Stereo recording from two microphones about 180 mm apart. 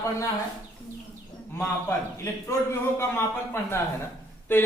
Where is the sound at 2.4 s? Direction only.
15° left (ahead or behind).